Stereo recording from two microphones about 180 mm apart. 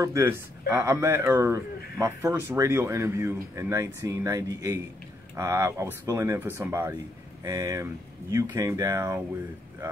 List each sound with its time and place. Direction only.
0.0 s speech: 15° right (ahead or behind)